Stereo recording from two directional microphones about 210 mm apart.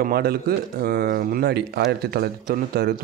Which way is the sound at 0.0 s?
45° right (ahead or behind).